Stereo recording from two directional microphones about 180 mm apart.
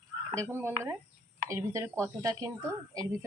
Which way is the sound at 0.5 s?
15° right (ahead or behind).